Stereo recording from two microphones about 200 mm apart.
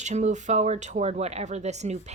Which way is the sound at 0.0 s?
35° right (ahead or behind).